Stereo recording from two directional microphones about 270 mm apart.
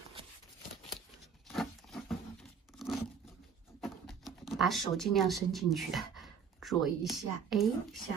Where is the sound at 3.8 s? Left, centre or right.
Centre.